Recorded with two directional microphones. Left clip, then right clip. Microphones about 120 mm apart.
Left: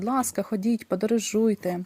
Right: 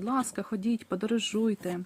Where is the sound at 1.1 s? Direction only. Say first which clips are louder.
Left 2 dB; 5° right (ahead or behind).